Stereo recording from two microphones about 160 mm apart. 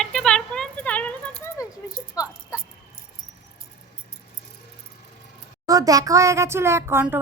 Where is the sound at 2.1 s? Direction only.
25° left (ahead or behind).